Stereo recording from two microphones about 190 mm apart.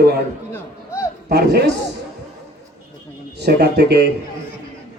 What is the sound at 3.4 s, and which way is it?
Speech, 60° right (ahead or behind).